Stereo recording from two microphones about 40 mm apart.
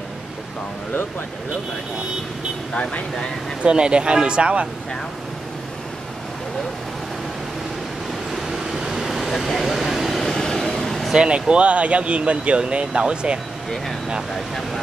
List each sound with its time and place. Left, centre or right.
2.7 s speech: left
3.6 s speech: right
8.3 s vehicle: centre
10.8 s a sound: centre
11.1 s speech: right
14.3 s speech: centre